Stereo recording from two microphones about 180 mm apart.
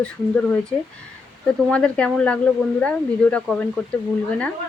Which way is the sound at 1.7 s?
5° left (ahead or behind).